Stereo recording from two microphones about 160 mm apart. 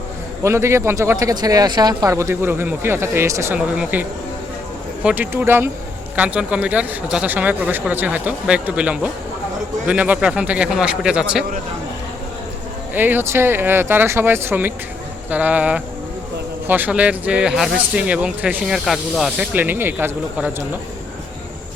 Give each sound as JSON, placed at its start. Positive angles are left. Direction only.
{"t": 0.4, "sound": "speech", "side_deg": -15}
{"t": 12.9, "sound": "speech", "side_deg": -10}